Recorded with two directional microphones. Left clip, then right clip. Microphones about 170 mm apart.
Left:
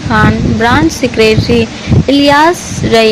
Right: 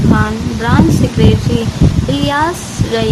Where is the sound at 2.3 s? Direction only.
25° left (ahead or behind).